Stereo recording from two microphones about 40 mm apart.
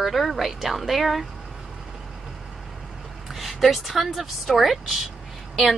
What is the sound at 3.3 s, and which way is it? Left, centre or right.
Speech, centre.